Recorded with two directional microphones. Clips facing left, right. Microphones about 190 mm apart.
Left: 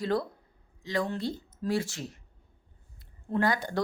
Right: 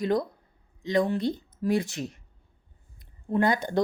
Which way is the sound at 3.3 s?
20° right (ahead or behind).